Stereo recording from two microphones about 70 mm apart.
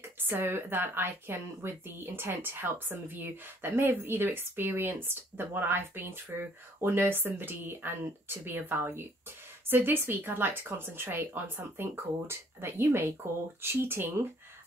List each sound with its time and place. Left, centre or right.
0.2 s speech: right